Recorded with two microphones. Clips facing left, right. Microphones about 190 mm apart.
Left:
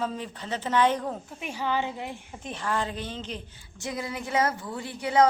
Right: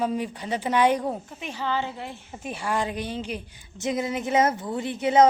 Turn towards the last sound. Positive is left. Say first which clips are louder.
# right 4 dB
turn(degrees=-20)  # may be behind; listen again after turning